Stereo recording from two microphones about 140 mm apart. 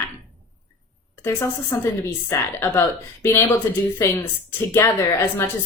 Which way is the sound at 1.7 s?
20° left (ahead or behind).